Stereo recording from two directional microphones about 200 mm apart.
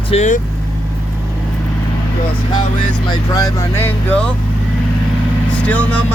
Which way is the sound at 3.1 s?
15° left (ahead or behind).